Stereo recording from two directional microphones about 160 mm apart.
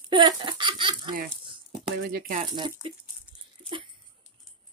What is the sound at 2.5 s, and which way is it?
Speech, 30° right (ahead or behind).